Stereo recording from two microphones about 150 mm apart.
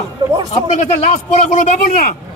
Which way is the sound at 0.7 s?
55° left (ahead or behind).